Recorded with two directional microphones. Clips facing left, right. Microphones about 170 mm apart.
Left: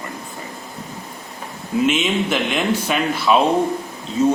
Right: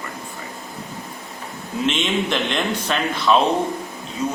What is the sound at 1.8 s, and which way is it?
A man's voice, 5° left (ahead or behind).